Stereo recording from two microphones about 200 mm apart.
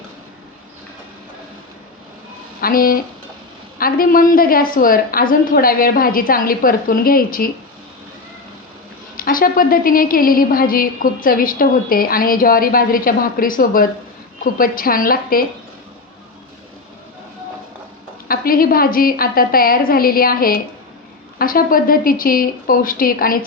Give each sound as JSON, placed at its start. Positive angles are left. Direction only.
{"t": 2.6, "sound": "a woman's voice", "side_deg": 45}
{"t": 9.1, "sound": "a woman's voice", "side_deg": 45}
{"t": 18.3, "sound": "a woman's voice", "side_deg": 45}